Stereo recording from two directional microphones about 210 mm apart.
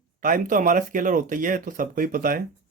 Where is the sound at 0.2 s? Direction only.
40° right (ahead or behind).